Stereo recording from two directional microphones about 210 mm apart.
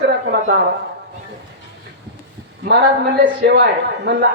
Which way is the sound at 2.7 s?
55° right (ahead or behind).